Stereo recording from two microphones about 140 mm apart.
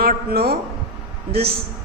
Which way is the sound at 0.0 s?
90° right.